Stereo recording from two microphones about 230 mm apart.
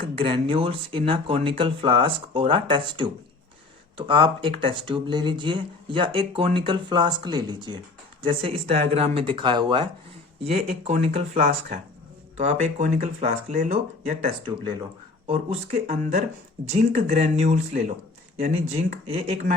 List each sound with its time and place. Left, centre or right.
0.0 s speech: right